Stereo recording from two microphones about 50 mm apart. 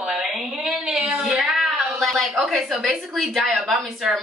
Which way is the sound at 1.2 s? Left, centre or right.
Centre.